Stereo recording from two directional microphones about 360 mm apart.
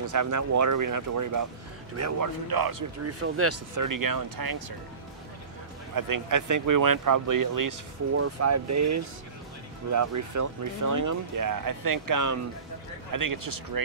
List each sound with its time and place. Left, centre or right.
0.0 s speech: right
3.1 s speech: right
5.9 s speech: right
8.2 s speech: right